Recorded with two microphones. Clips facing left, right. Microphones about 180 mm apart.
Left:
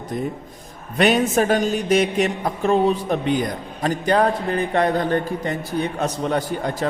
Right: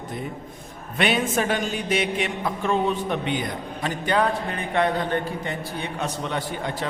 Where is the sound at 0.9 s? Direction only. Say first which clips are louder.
Left 5 dB; 40° left (ahead or behind).